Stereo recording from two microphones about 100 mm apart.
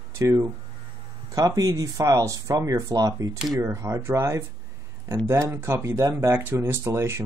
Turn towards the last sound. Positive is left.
turn(degrees=-25)  # may be behind; listen again after turning